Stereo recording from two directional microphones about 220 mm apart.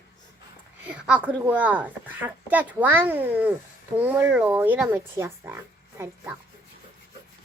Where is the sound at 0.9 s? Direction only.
5° right (ahead or behind).